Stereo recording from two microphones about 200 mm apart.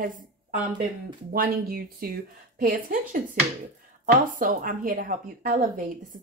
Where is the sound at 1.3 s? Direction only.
45° right (ahead or behind).